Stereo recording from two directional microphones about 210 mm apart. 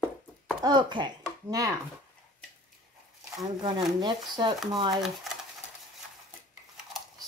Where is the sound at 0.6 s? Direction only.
20° right (ahead or behind).